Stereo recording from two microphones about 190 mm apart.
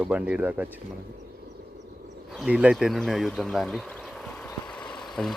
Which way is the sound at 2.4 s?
5° right (ahead or behind).